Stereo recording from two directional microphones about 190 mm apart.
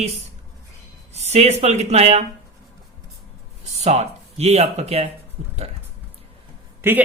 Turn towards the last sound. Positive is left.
turn(degrees=-10)  # may be behind; listen again after turning